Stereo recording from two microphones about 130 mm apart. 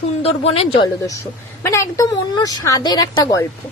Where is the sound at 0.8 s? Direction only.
25° left (ahead or behind).